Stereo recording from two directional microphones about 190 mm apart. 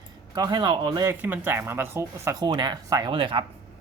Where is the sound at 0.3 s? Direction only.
20° right (ahead or behind).